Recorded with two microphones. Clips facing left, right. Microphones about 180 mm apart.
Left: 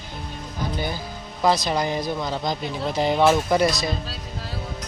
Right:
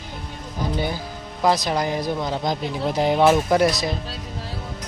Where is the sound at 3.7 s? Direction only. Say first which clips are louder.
Right 1 dB; 20° right (ahead or behind).